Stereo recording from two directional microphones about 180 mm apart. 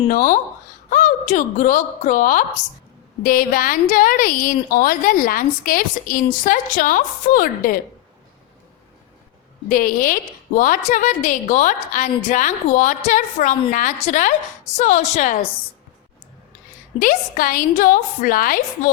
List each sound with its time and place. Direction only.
0.1 s a woman's voice: 50° left (ahead or behind)
9.6 s a woman's voice: 50° left (ahead or behind)
17.0 s a woman's voice: 50° left (ahead or behind)